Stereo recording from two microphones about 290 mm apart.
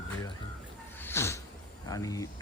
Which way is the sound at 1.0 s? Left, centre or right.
Centre.